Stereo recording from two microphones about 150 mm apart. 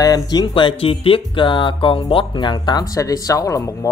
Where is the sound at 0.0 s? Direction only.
25° left (ahead or behind).